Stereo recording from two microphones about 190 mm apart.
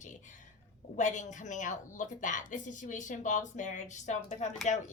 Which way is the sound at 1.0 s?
40° left (ahead or behind).